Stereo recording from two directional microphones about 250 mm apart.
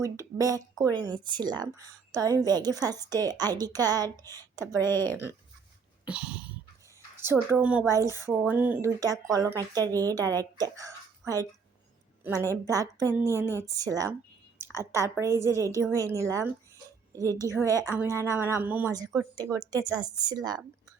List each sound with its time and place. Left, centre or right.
0.0 s speech: centre
4.8 s a woman's voice: centre
6.1 s dog: centre
7.2 s speech: centre
12.2 s a woman's voice: centre
15.3 s a woman's voice: centre
15.8 s a woman's voice: centre